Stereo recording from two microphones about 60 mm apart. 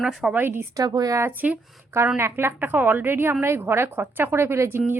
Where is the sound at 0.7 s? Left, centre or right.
Right.